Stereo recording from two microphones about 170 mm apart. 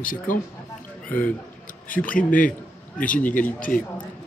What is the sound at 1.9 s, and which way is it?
Speech, 55° left (ahead or behind).